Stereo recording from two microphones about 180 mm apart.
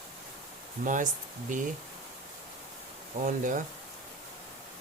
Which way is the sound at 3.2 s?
45° right (ahead or behind).